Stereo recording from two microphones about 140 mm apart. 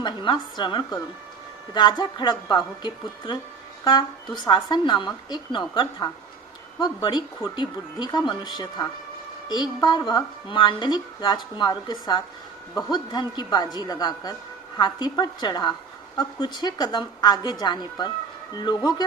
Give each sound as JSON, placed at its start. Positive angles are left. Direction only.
{"t": 0.0, "sound": "a woman's voice", "side_deg": 30}